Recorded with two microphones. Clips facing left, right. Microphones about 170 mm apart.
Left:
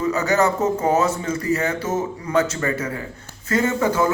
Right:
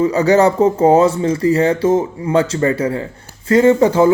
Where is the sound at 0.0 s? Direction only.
30° right (ahead or behind).